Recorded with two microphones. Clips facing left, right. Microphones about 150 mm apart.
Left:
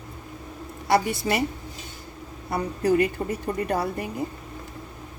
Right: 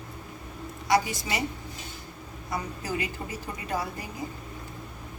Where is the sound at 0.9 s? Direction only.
60° left (ahead or behind).